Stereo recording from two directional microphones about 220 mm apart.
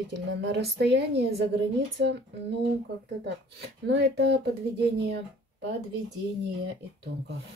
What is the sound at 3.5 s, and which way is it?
Speech, 50° right (ahead or behind).